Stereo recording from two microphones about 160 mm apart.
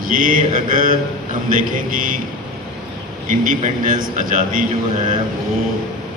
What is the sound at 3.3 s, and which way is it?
A man's voice, 55° right (ahead or behind).